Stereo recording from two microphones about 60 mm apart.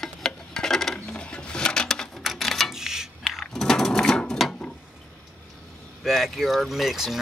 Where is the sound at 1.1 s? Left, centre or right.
Centre.